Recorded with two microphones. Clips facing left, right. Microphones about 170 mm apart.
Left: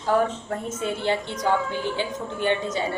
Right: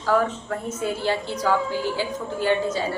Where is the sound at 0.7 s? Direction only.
20° left (ahead or behind).